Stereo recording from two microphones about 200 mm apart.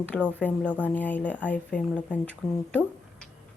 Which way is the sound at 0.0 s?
5° left (ahead or behind).